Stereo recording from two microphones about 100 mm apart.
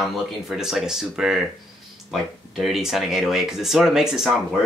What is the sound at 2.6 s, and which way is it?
Speech, centre (ahead or behind).